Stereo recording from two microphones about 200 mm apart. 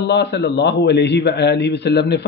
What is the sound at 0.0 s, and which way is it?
Speech, 60° left (ahead or behind).